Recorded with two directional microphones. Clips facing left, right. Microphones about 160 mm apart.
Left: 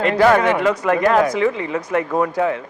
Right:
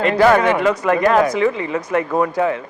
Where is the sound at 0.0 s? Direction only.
15° right (ahead or behind).